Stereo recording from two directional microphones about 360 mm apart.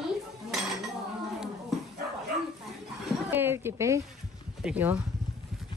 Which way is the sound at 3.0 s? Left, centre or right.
Centre.